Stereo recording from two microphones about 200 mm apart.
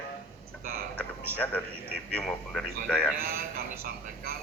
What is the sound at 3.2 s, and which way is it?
Speech, 50° right (ahead or behind).